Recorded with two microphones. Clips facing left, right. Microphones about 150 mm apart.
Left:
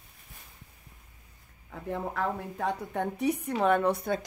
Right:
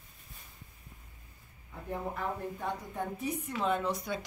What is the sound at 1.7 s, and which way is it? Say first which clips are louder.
A woman's voice: left 3 dB; 90° left.